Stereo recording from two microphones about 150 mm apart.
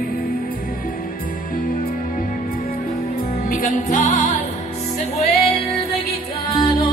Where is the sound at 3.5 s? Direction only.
65° left (ahead or behind).